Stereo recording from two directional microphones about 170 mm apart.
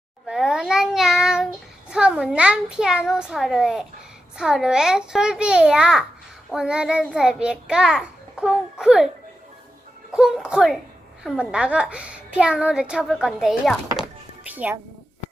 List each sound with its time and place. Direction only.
0.3 s a child's voice: 5° right (ahead or behind)
10.1 s a child's voice: 5° right (ahead or behind)
14.4 s music: 10° right (ahead or behind)